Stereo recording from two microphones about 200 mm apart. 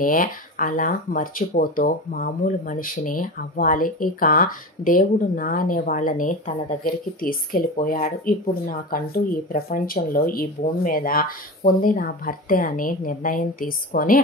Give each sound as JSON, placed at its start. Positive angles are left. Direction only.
{"t": 0.0, "sound": "speech", "side_deg": 45}